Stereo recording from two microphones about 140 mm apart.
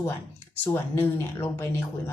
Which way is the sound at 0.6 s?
15° left (ahead or behind).